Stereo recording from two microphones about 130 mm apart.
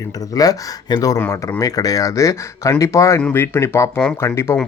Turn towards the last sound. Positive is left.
turn(degrees=20)  # may be behind; listen again after turning